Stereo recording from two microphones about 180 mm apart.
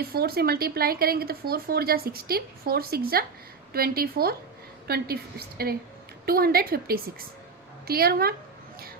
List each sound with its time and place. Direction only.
0.0 s speech: 60° right (ahead or behind)